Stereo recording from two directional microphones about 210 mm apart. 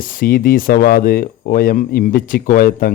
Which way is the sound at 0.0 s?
40° left (ahead or behind).